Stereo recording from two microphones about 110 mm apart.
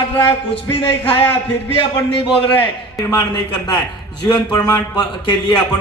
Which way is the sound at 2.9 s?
35° left (ahead or behind).